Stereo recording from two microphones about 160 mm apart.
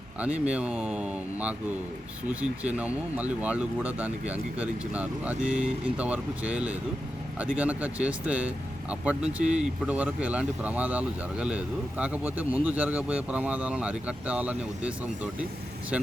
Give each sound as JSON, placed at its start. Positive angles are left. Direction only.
{"t": 0.2, "sound": "speech", "side_deg": -10}